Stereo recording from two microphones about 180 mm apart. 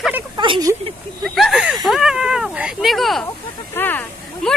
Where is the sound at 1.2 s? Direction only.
Centre (ahead or behind).